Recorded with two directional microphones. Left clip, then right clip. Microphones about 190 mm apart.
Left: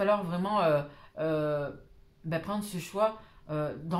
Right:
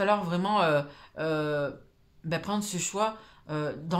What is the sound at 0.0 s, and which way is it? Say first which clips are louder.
Speech: right 2 dB; 40° right (ahead or behind).